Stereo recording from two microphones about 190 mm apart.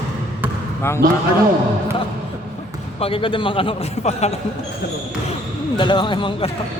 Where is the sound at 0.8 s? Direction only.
15° left (ahead or behind).